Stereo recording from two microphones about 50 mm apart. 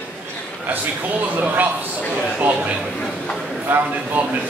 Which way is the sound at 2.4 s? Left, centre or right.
Right.